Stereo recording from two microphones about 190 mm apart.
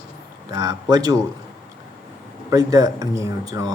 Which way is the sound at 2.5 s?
15° right (ahead or behind).